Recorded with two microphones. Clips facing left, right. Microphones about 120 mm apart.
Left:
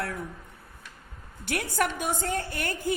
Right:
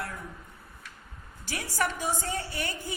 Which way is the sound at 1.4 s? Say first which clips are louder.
Left 3 dB; 60° left (ahead or behind).